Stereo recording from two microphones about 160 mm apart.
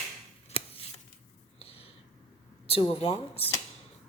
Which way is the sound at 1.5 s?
35° left (ahead or behind).